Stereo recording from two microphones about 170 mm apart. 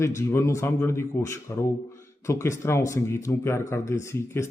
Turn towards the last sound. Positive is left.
turn(degrees=15)  # may be behind; listen again after turning